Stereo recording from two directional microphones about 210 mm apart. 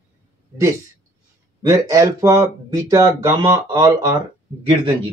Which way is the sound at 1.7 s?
15° right (ahead or behind).